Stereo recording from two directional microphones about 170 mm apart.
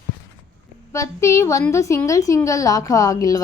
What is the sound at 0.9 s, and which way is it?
A woman's voice, 15° left (ahead or behind).